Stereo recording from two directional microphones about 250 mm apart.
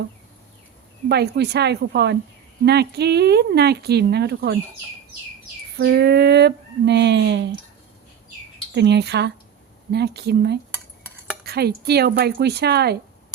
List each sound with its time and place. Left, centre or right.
1.0 s speech: right
5.7 s speech: right
8.7 s speech: right